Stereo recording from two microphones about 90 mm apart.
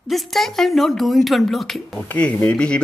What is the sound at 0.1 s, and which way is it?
Speech, centre (ahead or behind).